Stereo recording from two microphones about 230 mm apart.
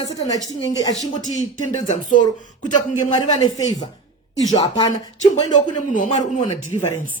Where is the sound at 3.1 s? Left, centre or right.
Centre.